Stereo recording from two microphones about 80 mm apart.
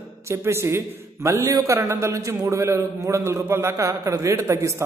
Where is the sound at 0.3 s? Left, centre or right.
Right.